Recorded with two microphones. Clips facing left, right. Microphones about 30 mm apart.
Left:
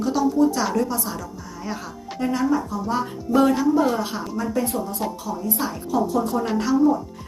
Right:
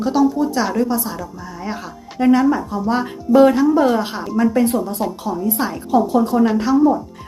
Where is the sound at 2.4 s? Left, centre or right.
Right.